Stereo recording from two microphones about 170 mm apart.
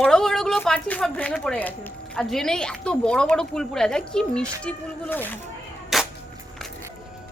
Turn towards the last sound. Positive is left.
turn(degrees=0)  # may be behind; listen again after turning